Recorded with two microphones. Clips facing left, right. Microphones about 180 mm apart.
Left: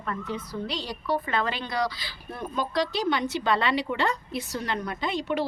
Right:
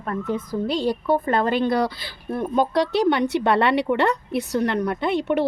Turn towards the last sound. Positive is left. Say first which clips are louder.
# right 7 dB
turn(degrees=-65)  # may be behind; listen again after turning